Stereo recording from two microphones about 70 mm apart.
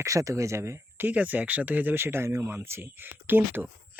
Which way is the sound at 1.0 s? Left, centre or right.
Right.